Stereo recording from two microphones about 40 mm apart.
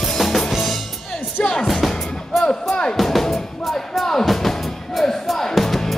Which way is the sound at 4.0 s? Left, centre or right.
Centre.